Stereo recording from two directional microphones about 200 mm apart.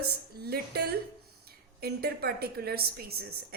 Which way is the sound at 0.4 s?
50° right (ahead or behind).